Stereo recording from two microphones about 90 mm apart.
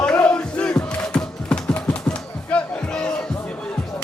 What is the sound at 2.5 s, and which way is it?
Music, 10° left (ahead or behind).